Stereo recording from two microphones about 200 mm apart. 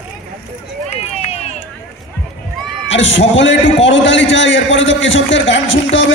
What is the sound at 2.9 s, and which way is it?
A man's voice, 65° left (ahead or behind).